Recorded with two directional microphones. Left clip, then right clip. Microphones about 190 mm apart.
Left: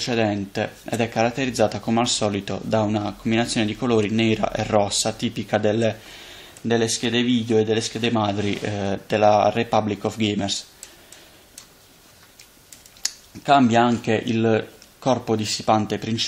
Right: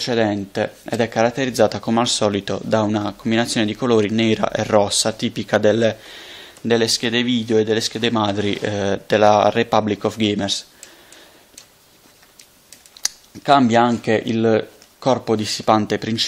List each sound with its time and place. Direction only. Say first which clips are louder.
0.0 s speech: right 3 dB; 35° right (ahead or behind)
13.0 s speech: right 3 dB; 40° right (ahead or behind)